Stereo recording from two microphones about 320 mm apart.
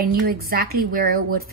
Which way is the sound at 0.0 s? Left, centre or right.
Right.